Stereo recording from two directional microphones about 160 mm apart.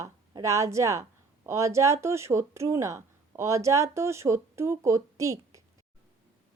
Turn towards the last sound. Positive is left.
turn(degrees=-20)  # may be behind; listen again after turning